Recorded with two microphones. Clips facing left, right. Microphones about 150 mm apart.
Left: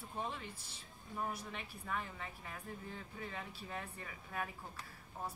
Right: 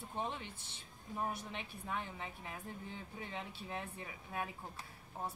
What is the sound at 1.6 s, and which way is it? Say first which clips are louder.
Speech: even; 20° right (ahead or behind).